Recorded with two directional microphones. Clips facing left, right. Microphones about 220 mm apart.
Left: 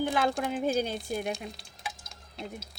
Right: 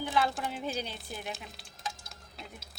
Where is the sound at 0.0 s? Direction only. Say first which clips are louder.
Left 3 dB; 50° left (ahead or behind).